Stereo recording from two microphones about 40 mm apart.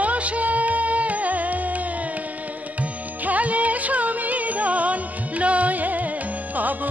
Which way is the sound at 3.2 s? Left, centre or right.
Right.